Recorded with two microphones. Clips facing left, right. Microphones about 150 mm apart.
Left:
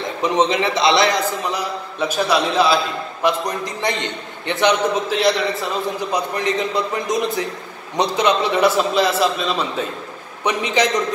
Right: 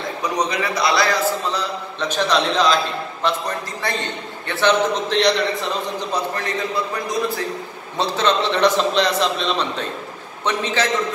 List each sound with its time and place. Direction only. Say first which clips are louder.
0.2 s a man's voice: left 5 dB; 25° left (ahead or behind)
5.1 s a man's voice: right 3 dB; 5° left (ahead or behind)